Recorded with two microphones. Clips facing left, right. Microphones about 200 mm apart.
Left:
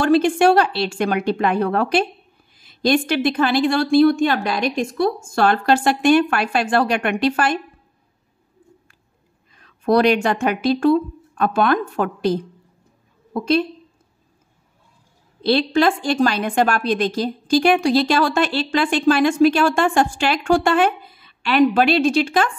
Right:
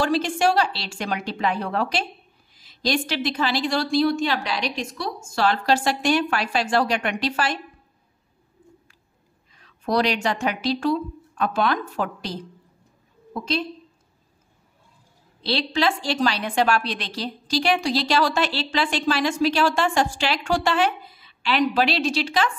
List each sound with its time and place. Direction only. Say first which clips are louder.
0.0 s a woman's voice: left 6 dB; 55° left (ahead or behind)
9.6 s a woman's voice: left 6 dB; 55° left (ahead or behind)
15.4 s a woman's voice: left 6 dB; 50° left (ahead or behind)